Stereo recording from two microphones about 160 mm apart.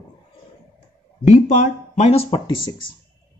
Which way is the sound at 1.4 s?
50° left (ahead or behind).